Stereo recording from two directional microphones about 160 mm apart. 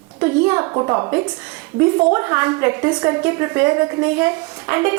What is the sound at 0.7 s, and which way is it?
A woman's voice, 20° right (ahead or behind).